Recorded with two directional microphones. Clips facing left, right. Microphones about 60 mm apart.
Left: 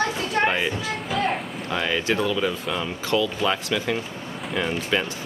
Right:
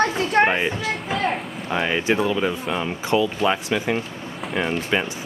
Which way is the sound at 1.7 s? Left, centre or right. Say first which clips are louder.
Right 3 dB; right.